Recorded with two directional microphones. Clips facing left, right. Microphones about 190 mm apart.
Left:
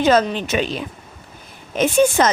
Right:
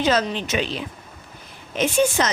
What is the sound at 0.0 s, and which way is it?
Speech, 50° left (ahead or behind).